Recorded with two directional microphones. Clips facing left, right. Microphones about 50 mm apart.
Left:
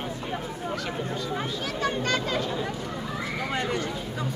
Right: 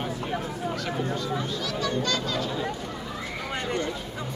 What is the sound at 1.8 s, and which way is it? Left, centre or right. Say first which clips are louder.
Speech: left 2 dB; left.